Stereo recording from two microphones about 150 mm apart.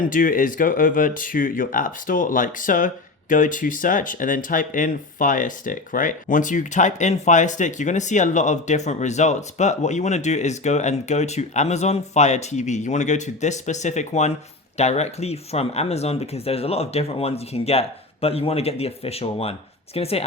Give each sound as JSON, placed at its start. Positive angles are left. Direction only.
{"t": 0.0, "sound": "speech", "side_deg": 65}